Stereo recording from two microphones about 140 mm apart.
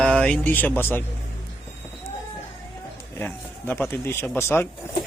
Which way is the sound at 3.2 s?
15° left (ahead or behind).